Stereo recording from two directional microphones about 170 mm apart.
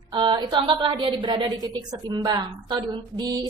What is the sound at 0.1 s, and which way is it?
A woman's voice, 25° right (ahead or behind).